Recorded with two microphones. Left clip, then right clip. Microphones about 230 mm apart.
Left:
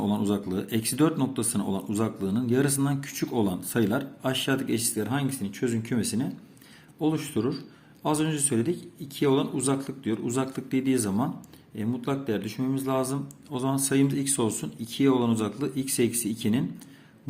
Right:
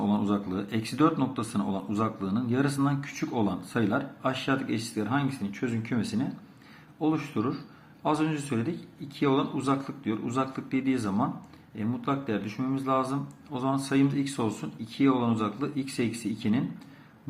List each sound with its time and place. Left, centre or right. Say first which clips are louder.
0.0 s speech: left 1 dB; left